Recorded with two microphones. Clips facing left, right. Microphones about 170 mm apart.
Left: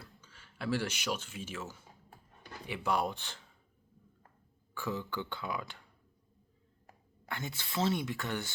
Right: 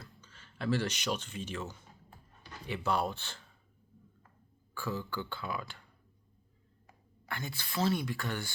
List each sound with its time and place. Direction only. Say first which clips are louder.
0.0 s speech: right 1 dB; 10° left (ahead or behind)
4.7 s speech: even; 20° left (ahead or behind)
7.3 s speech: even; 20° left (ahead or behind)